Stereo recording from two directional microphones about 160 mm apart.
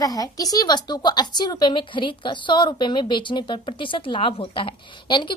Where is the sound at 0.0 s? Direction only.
20° left (ahead or behind).